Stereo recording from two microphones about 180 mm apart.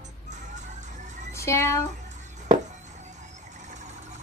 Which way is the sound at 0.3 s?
40° right (ahead or behind).